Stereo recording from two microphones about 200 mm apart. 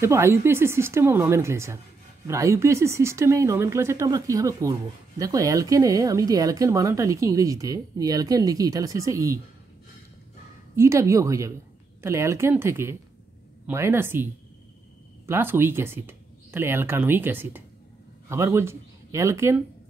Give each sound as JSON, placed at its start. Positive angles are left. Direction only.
{"t": 0.0, "sound": "speech", "side_deg": -15}
{"t": 10.8, "sound": "speech", "side_deg": -15}